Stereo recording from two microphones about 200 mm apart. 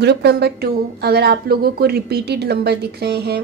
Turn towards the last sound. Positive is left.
turn(degrees=-55)  # may be behind; listen again after turning